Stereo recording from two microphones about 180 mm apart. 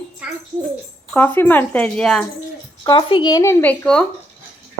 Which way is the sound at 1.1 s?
10° left (ahead or behind).